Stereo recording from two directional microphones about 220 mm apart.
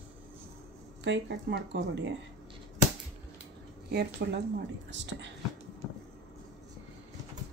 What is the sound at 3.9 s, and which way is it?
Speech, 45° right (ahead or behind).